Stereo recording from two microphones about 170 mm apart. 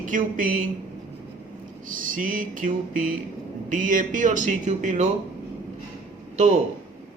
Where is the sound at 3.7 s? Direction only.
50° right (ahead or behind).